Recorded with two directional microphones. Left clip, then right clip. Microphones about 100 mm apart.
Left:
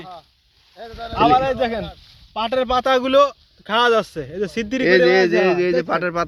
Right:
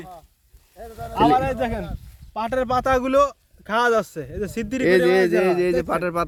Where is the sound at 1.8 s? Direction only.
Centre (ahead or behind); by 4.3 s 15° left (ahead or behind).